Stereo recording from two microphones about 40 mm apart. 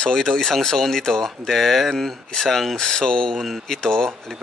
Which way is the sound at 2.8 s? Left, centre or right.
Centre.